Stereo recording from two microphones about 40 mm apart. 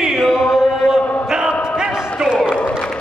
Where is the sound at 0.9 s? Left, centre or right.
Centre.